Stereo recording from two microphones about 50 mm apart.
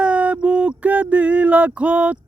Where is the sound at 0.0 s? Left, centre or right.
Right.